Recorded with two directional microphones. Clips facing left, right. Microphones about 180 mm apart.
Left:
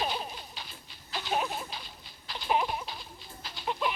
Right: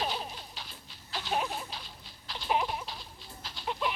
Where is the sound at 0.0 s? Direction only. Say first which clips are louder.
Left 1 dB; 5° left (ahead or behind).